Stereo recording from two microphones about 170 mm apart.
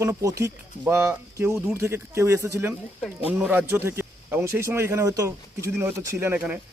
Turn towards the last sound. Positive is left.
turn(degrees=-5)  # may be behind; listen again after turning